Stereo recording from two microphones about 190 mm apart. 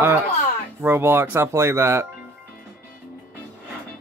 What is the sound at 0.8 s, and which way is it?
Speech, 10° right (ahead or behind).